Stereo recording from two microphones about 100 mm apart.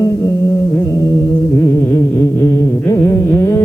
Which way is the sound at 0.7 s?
35° left (ahead or behind).